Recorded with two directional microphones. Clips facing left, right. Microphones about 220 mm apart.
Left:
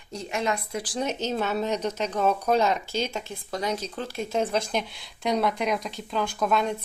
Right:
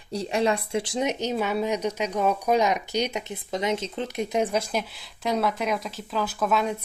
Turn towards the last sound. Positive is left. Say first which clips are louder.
# even
turn(degrees=-5)  # may be behind; listen again after turning